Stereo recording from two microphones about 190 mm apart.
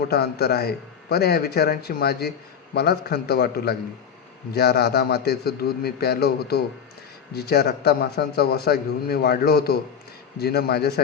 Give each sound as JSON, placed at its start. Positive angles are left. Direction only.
{"t": 0.1, "sound": "a man's voice", "side_deg": 55}